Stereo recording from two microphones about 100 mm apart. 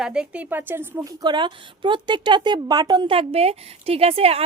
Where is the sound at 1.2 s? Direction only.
50° right (ahead or behind).